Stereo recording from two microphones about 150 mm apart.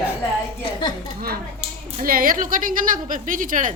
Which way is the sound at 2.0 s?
70° right (ahead or behind).